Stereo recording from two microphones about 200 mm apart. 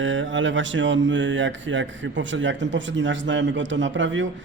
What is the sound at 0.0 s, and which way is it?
Speech, 70° right (ahead or behind).